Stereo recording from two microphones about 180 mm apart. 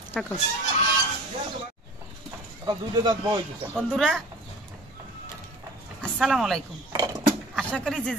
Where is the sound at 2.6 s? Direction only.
25° right (ahead or behind).